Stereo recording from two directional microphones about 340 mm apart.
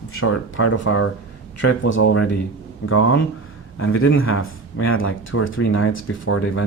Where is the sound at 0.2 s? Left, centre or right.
Left.